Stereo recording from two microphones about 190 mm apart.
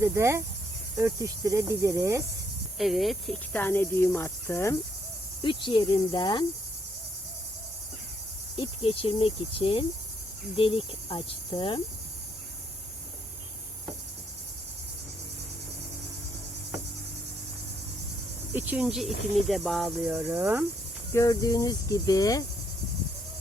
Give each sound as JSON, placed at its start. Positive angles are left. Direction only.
{"t": 0.0, "sound": "cricket", "side_deg": -15}
{"t": 2.7, "sound": "speech", "side_deg": 0}
{"t": 5.4, "sound": "cricket", "side_deg": 25}
{"t": 8.5, "sound": "cricket", "side_deg": 30}
{"t": 18.5, "sound": "cricket", "side_deg": -10}
{"t": 21.1, "sound": "cricket", "side_deg": 15}